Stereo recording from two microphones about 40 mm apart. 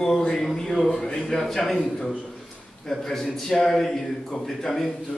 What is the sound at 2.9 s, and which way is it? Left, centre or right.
A man's voice, centre.